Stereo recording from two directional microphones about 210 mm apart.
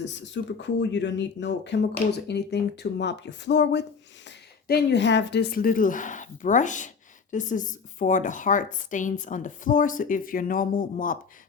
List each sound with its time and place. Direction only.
0.0 s speech: 60° left (ahead or behind); by 11.2 s 40° left (ahead or behind)